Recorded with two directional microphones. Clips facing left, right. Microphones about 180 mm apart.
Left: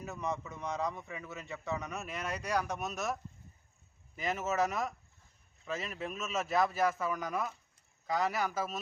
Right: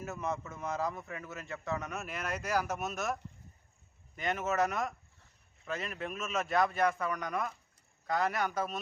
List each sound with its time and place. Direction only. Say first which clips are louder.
0.0 s a man's voice: right 1 dB; centre (ahead or behind)